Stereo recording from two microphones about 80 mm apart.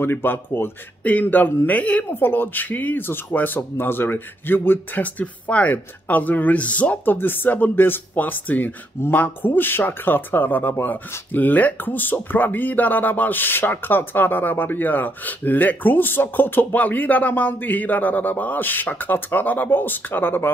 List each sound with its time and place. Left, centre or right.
0.0 s speech: left